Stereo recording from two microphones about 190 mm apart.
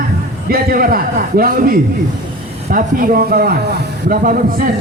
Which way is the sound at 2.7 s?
45° right (ahead or behind).